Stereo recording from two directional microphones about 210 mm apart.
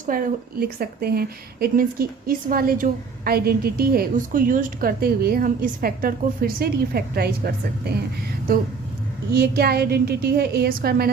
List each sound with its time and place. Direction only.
0.0 s a woman's voice: 40° right (ahead or behind)